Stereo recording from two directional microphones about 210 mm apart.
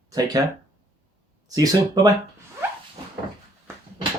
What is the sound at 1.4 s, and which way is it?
Speech, 15° right (ahead or behind).